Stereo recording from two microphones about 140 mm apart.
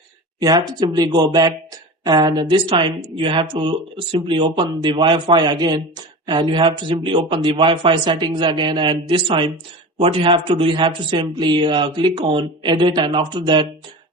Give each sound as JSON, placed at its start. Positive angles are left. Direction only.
{"t": 0.3, "sound": "speech", "side_deg": -25}